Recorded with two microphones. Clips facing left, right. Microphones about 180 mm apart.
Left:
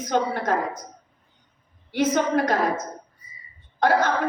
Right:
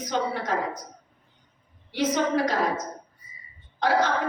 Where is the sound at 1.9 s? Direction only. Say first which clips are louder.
Left 3 dB; 50° left (ahead or behind).